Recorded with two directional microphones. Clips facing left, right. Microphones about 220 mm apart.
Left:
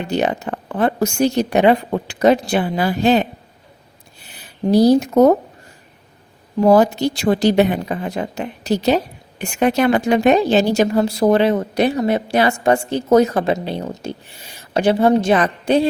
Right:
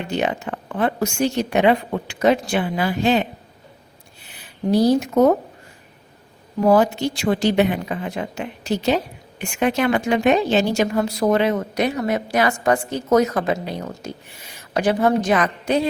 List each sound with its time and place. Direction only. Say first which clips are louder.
0.1 s speech: left 3 dB; 40° left (ahead or behind)
4.7 s speech: left 4 dB; 35° left (ahead or behind)
6.7 s speech: left 3 dB; 40° left (ahead or behind)